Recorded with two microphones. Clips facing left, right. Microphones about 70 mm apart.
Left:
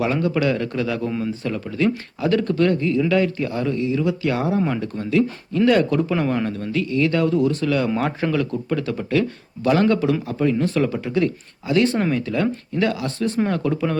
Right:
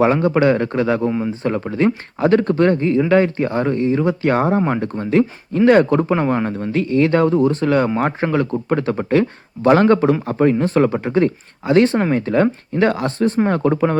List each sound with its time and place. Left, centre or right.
0.0 s speech: right